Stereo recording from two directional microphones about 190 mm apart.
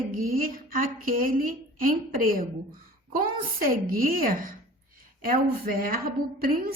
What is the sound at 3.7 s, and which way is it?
A woman's voice, 50° right (ahead or behind).